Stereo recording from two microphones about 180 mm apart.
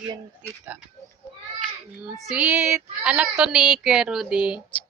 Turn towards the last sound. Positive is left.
turn(degrees=-5)  # may be behind; listen again after turning